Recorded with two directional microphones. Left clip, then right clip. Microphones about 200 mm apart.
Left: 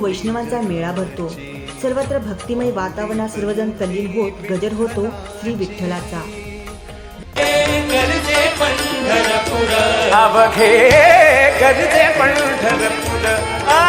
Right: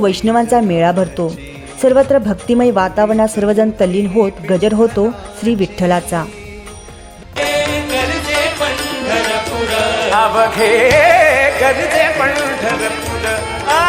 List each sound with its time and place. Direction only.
0.0 s speech: 55° right (ahead or behind)
7.3 s music: centre (ahead or behind)